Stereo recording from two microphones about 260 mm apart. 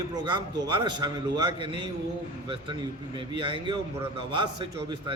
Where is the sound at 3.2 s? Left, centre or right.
Centre.